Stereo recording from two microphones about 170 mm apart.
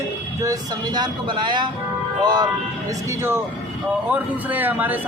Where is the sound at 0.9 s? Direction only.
25° right (ahead or behind).